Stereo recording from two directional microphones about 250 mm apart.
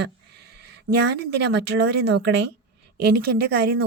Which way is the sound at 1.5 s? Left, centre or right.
Right.